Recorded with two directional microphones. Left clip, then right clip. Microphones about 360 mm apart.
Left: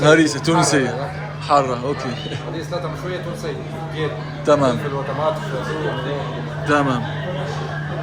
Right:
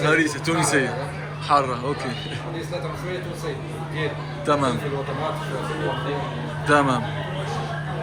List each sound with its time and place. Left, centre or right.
0.0 s speech: centre
4.4 s speech: centre
6.7 s a man's voice: centre